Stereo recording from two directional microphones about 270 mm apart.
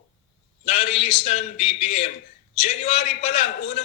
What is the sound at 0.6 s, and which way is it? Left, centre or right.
A man's voice, left.